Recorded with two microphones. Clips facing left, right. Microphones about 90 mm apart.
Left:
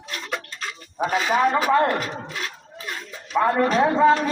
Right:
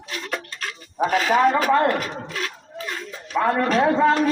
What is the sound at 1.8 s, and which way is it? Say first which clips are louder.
Speech: even; 20° left (ahead or behind).